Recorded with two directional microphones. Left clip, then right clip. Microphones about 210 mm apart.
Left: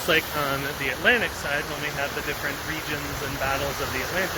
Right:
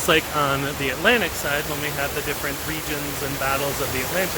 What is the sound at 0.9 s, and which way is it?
Speech, 15° right (ahead or behind).